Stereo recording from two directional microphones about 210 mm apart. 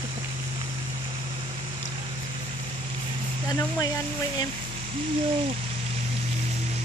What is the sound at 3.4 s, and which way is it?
Speech, 15° left (ahead or behind).